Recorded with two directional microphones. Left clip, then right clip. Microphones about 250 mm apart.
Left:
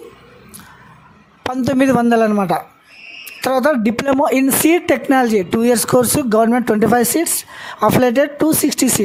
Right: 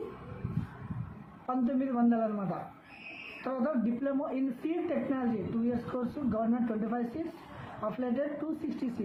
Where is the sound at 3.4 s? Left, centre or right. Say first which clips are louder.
Left 18 dB; left.